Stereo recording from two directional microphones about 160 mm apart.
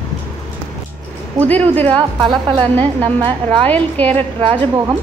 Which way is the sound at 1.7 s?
10° left (ahead or behind).